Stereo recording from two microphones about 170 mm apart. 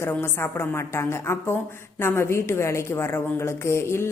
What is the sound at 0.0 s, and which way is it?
A woman's voice, 15° left (ahead or behind).